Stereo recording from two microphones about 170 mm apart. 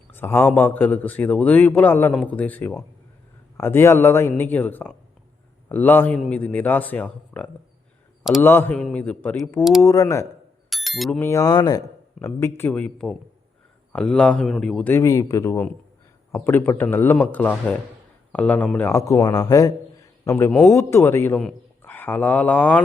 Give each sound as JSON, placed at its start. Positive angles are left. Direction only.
{"t": 0.1, "sound": "a man's voice", "side_deg": 15}
{"t": 9.8, "sound": "speech", "side_deg": 20}
{"t": 10.7, "sound": "a sound", "side_deg": 0}
{"t": 11.2, "sound": "speech", "side_deg": 20}
{"t": 12.2, "sound": "a man's voice", "side_deg": 5}
{"t": 14.9, "sound": "a man's voice", "side_deg": 20}